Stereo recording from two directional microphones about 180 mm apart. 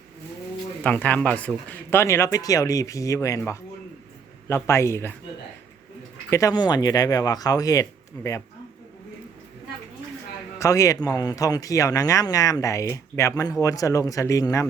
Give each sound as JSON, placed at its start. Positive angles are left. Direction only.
{"t": 0.8, "sound": "speech", "side_deg": 10}
{"t": 6.3, "sound": "speech", "side_deg": 20}
{"t": 10.6, "sound": "speech", "side_deg": 15}